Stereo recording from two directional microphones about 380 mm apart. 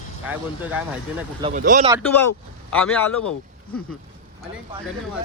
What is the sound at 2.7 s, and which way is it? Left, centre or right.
Speech, centre.